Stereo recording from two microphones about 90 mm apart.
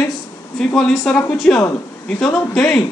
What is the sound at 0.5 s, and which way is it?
A man's voice, centre (ahead or behind).